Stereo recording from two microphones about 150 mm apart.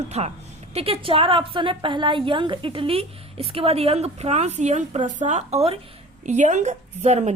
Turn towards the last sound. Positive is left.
turn(degrees=-50)  # may be behind; listen again after turning